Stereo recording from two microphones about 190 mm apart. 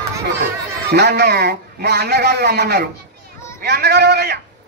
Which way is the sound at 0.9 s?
60° right (ahead or behind).